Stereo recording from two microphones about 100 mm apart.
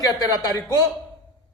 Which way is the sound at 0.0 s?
40° left (ahead or behind).